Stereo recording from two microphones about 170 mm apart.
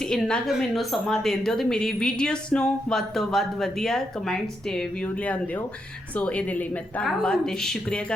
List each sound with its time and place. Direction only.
0.1 s a woman's voice: 5° left (ahead or behind)
6.1 s a woman's voice: 10° left (ahead or behind)